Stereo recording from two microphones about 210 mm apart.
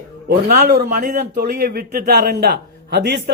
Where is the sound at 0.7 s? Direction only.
45° right (ahead or behind).